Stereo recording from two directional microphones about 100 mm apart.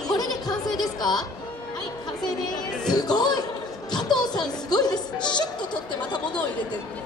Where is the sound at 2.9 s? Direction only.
45° left (ahead or behind).